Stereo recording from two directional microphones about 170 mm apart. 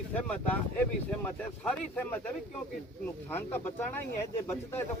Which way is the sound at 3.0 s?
10° left (ahead or behind).